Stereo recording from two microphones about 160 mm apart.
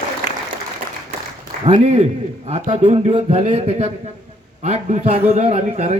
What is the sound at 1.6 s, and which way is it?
Speech, 40° right (ahead or behind).